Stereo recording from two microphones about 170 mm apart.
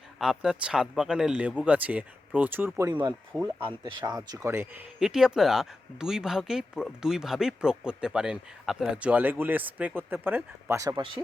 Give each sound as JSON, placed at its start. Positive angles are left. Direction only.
{"t": 0.2, "sound": "speech", "side_deg": -5}
{"t": 2.9, "sound": "speech", "side_deg": -25}